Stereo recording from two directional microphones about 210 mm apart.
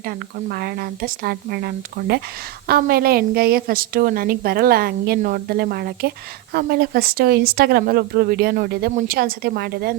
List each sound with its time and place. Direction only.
0.0 s speech: 45° right (ahead or behind)